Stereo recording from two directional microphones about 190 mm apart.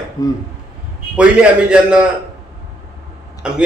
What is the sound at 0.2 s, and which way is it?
Speech, 20° left (ahead or behind).